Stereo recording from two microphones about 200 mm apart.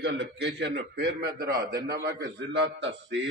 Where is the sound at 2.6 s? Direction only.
65° right (ahead or behind).